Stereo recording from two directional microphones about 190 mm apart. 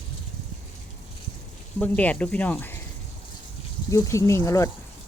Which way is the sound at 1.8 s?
5° left (ahead or behind).